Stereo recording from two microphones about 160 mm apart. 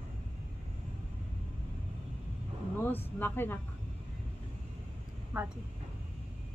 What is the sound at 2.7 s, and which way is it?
Speech, 10° left (ahead or behind).